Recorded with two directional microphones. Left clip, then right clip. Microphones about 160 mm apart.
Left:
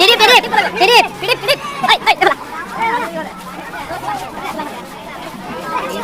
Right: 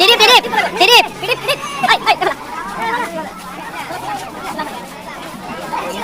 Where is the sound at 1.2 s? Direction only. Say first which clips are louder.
Left 2 dB; 40° left (ahead or behind).